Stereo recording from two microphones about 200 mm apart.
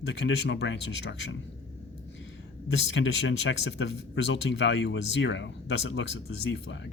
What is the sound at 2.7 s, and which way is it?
Speech, 65° left (ahead or behind).